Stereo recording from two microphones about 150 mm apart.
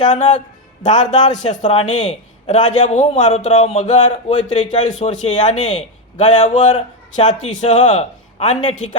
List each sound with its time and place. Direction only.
0.1 s a man's voice: 55° left (ahead or behind)